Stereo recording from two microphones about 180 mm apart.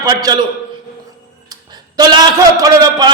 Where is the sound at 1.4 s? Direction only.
20° right (ahead or behind).